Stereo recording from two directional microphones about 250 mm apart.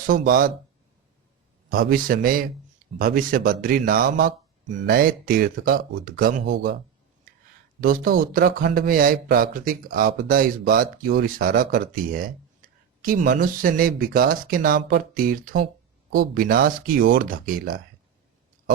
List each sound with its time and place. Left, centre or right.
0.1 s speech: right
1.7 s speech: right
7.8 s speech: right